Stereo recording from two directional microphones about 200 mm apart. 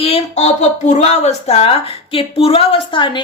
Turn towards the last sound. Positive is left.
turn(degrees=25)  # may be behind; listen again after turning